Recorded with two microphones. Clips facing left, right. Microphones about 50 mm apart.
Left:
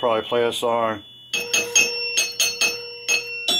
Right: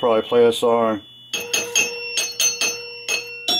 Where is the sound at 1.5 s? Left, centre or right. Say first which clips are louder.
Left 2 dB; centre.